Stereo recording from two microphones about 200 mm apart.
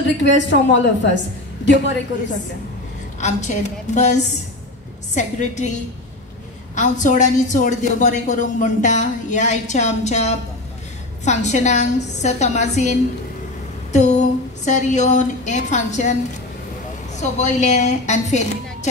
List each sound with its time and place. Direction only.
0.2 s a woman's voice: 65° left (ahead or behind)
3.2 s a woman's voice: 35° left (ahead or behind)
17.2 s a woman's voice: 35° left (ahead or behind)